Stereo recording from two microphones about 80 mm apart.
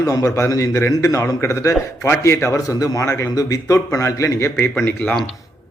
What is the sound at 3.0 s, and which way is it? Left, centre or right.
Speech, left.